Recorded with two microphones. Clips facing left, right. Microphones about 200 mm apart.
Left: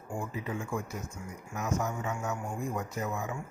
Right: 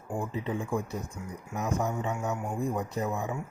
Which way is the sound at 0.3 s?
30° right (ahead or behind).